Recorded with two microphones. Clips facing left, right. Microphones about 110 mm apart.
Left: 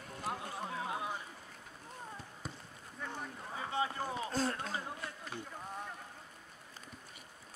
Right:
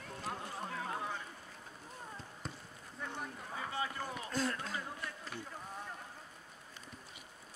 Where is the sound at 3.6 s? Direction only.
25° left (ahead or behind).